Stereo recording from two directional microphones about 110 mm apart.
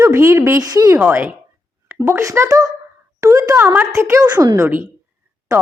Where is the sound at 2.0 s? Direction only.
25° right (ahead or behind).